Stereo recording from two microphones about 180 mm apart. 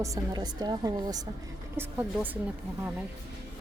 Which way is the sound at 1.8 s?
10° right (ahead or behind).